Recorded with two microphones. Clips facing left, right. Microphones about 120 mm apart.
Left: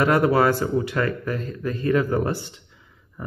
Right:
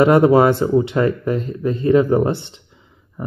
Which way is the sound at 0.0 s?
25° right (ahead or behind).